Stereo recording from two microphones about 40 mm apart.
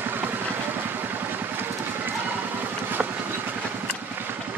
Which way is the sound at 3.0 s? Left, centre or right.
Right.